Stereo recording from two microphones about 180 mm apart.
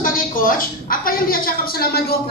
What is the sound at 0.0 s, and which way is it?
A woman's voice, 50° left (ahead or behind).